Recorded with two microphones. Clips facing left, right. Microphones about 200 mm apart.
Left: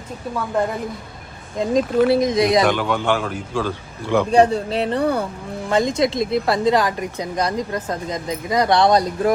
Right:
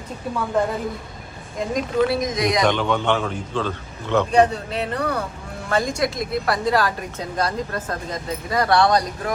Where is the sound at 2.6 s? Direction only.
5° left (ahead or behind).